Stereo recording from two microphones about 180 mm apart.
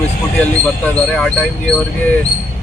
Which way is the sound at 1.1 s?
5° left (ahead or behind).